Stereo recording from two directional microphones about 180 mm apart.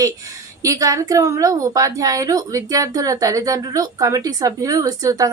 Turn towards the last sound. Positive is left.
turn(degrees=-20)  # may be behind; listen again after turning